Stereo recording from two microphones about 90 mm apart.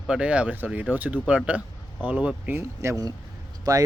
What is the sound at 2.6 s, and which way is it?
Speech, 35° right (ahead or behind).